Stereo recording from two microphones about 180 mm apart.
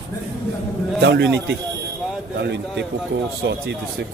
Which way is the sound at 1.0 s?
75° right (ahead or behind).